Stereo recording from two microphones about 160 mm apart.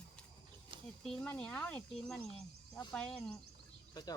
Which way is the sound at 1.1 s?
5° left (ahead or behind).